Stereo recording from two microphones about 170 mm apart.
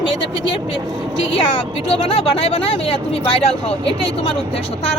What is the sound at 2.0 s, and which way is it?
Speech, 35° left (ahead or behind).